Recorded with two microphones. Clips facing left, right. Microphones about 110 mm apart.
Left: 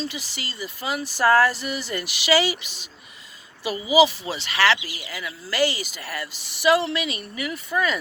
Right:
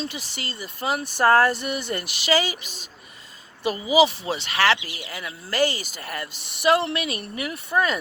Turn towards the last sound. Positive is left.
turn(degrees=-45)  # may be behind; listen again after turning